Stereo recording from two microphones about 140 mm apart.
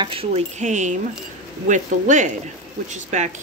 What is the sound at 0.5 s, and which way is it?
Speech, 60° right (ahead or behind).